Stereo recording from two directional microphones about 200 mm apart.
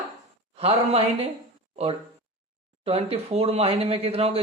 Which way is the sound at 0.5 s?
30° right (ahead or behind).